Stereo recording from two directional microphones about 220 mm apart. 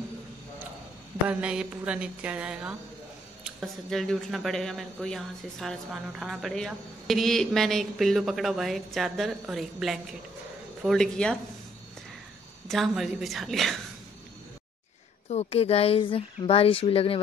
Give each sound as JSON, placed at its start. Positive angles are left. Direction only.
{"t": 1.3, "sound": "speech", "side_deg": -5}
{"t": 12.6, "sound": "speech", "side_deg": 0}
{"t": 15.2, "sound": "speech", "side_deg": 30}